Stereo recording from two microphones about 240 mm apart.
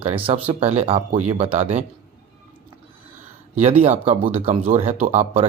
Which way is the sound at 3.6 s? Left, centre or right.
Right.